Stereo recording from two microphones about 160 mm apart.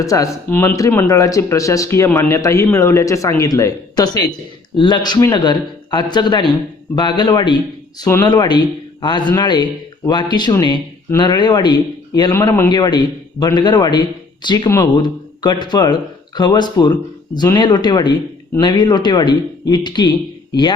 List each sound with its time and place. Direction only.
0.0 s speech: 20° left (ahead or behind)
12.3 s speech: 15° left (ahead or behind)